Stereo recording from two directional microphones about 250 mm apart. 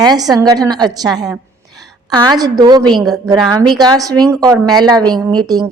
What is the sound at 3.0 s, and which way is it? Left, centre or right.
Speech, centre.